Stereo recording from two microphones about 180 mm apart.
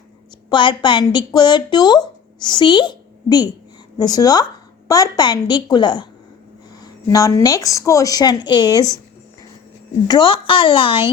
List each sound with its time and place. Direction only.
0.5 s speech: 25° left (ahead or behind)
10.1 s speech: 25° left (ahead or behind)